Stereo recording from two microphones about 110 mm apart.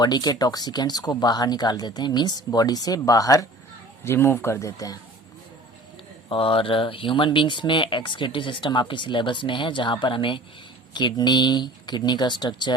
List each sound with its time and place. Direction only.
0.0 s speech: 40° left (ahead or behind)
4.0 s speech: 20° left (ahead or behind)
6.2 s speech: 50° left (ahead or behind)